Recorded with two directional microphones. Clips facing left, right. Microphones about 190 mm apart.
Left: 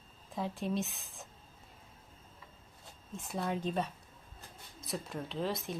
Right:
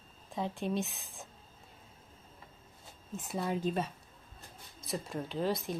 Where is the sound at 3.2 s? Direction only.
Centre (ahead or behind).